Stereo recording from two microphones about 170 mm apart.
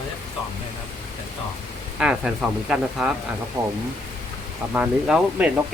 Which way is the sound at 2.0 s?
5° right (ahead or behind).